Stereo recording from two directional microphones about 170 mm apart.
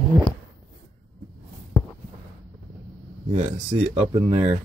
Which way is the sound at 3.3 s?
40° right (ahead or behind).